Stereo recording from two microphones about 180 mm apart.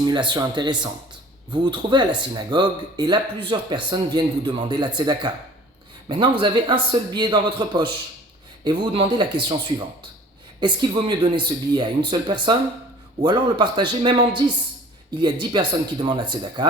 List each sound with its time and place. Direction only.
0.1 s speech: 25° right (ahead or behind)
6.4 s speech: 25° right (ahead or behind)